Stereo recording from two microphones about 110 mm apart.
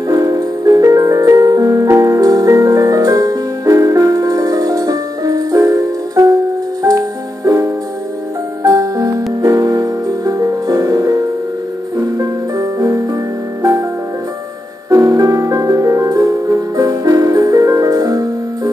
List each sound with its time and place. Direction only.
0.1 s music: 35° right (ahead or behind)
12.2 s music: 30° right (ahead or behind)
14.9 s music: 30° right (ahead or behind)